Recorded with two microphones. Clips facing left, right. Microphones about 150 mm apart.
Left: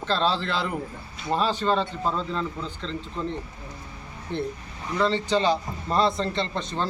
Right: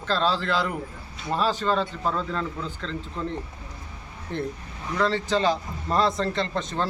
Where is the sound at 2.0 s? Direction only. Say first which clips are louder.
Right 1 dB; 25° left (ahead or behind).